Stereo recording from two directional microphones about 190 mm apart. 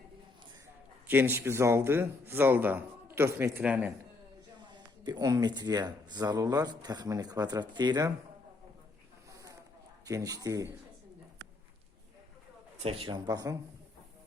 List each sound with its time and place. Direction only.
1.0 s a man's voice: 10° right (ahead or behind)
4.6 s speech: 25° right (ahead or behind)
10.1 s a man's voice: 20° right (ahead or behind)
12.8 s speech: 30° right (ahead or behind)